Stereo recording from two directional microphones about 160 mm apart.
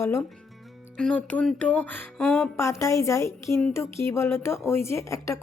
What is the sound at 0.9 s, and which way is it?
Speech, 5° left (ahead or behind).